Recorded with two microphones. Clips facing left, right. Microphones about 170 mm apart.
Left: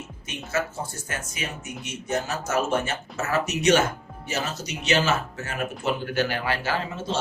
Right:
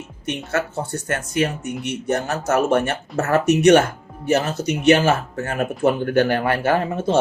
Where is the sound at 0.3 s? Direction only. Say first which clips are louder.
Right 5 dB; 65° right (ahead or behind).